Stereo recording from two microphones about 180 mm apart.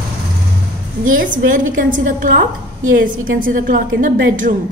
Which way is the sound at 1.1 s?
50° right (ahead or behind).